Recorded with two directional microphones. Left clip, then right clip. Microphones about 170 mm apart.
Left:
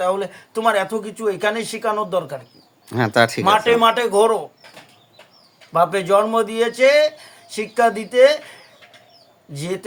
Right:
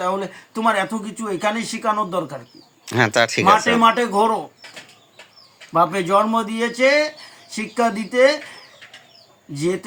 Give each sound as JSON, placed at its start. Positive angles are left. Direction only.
{"t": 0.0, "sound": "speech", "side_deg": 45}
{"t": 2.8, "sound": "speech", "side_deg": 5}
{"t": 3.8, "sound": "speech", "side_deg": 50}
{"t": 5.7, "sound": "speech", "side_deg": 45}